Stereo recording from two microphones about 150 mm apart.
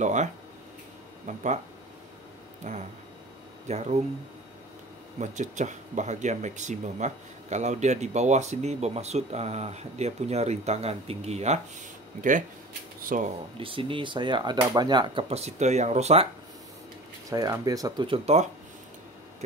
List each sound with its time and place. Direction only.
0.0 s speech: 50° right (ahead or behind)
2.6 s speech: 50° right (ahead or behind)
5.2 s speech: 55° right (ahead or behind)
12.2 s speech: 60° right (ahead or behind)
13.6 s speech: 35° right (ahead or behind)
17.3 s speech: 25° right (ahead or behind); by 18.5 s 45° right (ahead or behind)